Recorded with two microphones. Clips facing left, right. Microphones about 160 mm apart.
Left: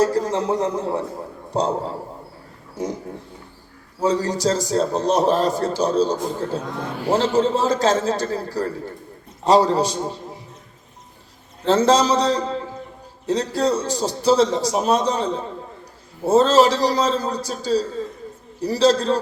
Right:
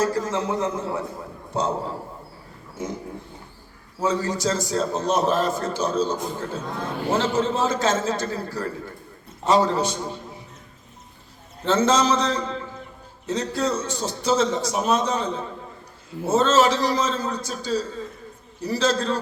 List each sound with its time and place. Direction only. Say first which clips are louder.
0.0 s a man's voice: left 4 dB; 35° left (ahead or behind)
4.0 s a man's voice: left 4 dB; 35° left (ahead or behind)
11.6 s a man's voice: left 3 dB; 35° left (ahead or behind)